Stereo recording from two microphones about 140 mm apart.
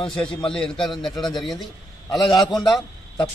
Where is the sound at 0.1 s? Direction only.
5° left (ahead or behind).